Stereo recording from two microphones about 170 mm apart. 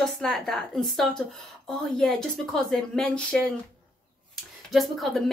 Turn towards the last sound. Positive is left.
turn(degrees=0)  # may be behind; listen again after turning